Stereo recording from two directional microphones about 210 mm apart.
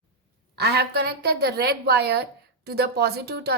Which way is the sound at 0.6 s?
50° right (ahead or behind).